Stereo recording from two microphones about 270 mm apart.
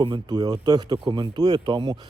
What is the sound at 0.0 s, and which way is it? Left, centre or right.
Speech, centre.